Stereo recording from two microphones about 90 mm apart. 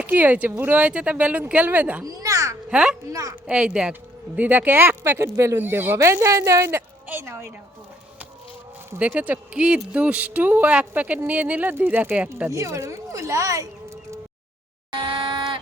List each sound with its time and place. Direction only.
0.0 s speech: 20° right (ahead or behind)
2.0 s a child's voice: 40° right (ahead or behind)
2.6 s speech: 10° right (ahead or behind)
3.1 s a child's voice: 35° right (ahead or behind)
3.4 s speech: 10° right (ahead or behind); by 7.5 s 30° right (ahead or behind)
9.0 s speech: 15° right (ahead or behind)
12.5 s speech: 35° right (ahead or behind)
14.9 s a sound: 75° right (ahead or behind)